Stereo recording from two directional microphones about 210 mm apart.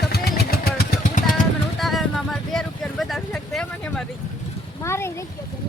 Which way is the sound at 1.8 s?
Centre (ahead or behind).